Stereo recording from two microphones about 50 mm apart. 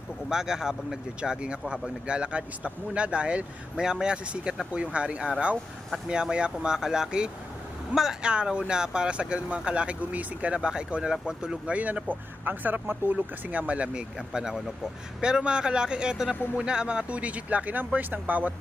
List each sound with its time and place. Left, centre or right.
0.3 s speech: centre
11.7 s speech: right
13.1 s speech: right
14.3 s speech: centre; by 18.5 s right